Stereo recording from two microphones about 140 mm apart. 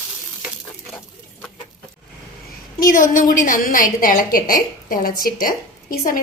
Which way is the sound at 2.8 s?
85° left.